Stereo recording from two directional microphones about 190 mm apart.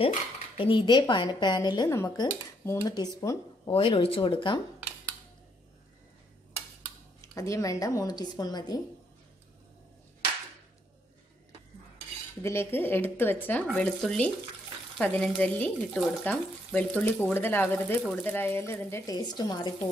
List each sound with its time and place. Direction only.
0.6 s speech: 25° left (ahead or behind)
7.2 s speech: 15° left (ahead or behind)
12.4 s speech: 10° left (ahead or behind)